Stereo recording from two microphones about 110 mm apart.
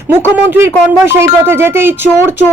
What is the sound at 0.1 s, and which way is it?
A woman's voice, 20° right (ahead or behind).